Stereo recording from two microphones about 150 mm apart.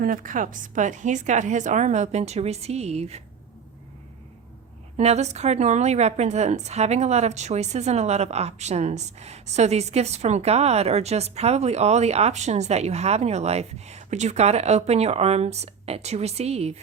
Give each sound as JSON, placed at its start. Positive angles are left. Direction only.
{"t": 0.0, "sound": "a woman's voice", "side_deg": -65}
{"t": 4.9, "sound": "a woman's voice", "side_deg": -45}